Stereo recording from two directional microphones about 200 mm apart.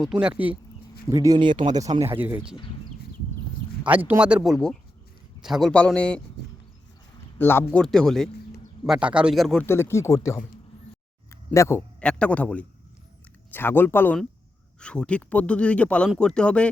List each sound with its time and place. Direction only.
0.0 s speech: 5° right (ahead or behind)
1.1 s speech: 15° right (ahead or behind)
2.0 s speech: 10° right (ahead or behind)
3.8 s speech: 10° right (ahead or behind)
7.3 s speech: 10° left (ahead or behind)
9.6 s speech: 10° left (ahead or behind)